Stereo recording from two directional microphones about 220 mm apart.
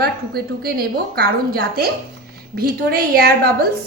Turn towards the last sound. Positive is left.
turn(degrees=-45)  # may be behind; listen again after turning